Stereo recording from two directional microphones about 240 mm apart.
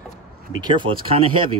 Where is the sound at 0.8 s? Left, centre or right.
Right.